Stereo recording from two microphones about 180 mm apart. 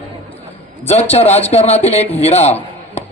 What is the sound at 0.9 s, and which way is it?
A man's voice, 35° left (ahead or behind).